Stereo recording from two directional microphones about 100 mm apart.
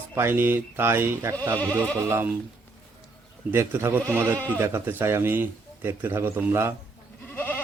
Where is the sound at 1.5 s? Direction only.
15° left (ahead or behind).